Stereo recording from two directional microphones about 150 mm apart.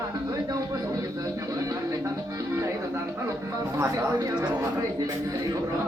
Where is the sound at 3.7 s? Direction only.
20° right (ahead or behind).